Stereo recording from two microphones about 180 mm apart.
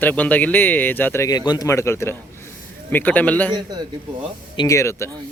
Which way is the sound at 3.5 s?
20° right (ahead or behind).